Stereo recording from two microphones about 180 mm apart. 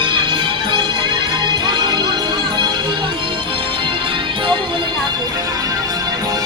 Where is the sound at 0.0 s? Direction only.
25° right (ahead or behind).